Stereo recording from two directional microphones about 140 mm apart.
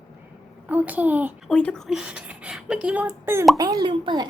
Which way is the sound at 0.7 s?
10° right (ahead or behind).